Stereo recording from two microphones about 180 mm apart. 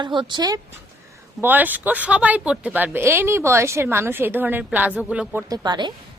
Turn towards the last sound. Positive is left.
turn(degrees=-25)  # may be behind; listen again after turning